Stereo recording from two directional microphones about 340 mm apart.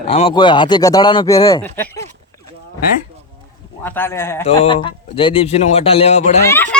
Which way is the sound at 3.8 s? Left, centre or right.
Centre.